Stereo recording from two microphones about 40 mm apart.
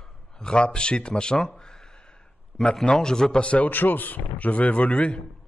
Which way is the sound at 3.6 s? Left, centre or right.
Left.